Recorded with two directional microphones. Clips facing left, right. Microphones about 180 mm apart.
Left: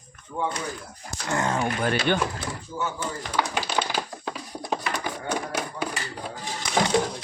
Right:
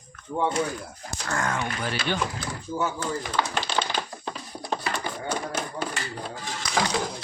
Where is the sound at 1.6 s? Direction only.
55° left (ahead or behind).